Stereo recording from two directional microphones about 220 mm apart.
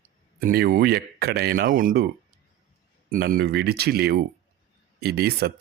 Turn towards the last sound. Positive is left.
turn(degrees=-45)  # may be behind; listen again after turning